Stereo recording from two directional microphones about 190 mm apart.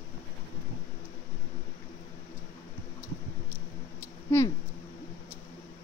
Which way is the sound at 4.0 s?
15° left (ahead or behind).